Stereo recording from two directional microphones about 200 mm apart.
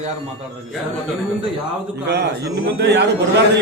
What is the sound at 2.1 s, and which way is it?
Speech, 55° right (ahead or behind).